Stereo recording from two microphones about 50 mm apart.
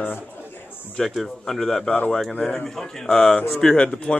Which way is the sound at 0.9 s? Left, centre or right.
Centre.